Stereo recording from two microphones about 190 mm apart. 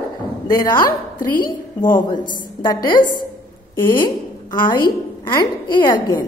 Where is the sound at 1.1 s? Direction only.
45° left (ahead or behind).